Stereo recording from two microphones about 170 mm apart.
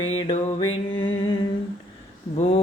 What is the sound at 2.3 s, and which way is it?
Speech, 40° left (ahead or behind).